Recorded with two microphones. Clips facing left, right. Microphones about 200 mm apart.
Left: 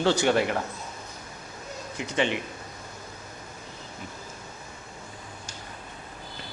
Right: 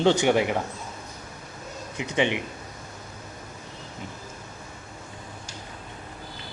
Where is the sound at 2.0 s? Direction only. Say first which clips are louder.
Right 2 dB; 15° right (ahead or behind).